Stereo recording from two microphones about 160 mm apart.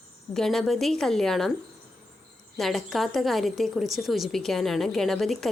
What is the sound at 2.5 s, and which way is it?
A woman's voice, centre (ahead or behind).